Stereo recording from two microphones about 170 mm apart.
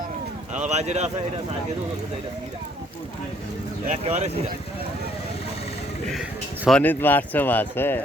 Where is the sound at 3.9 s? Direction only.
40° right (ahead or behind).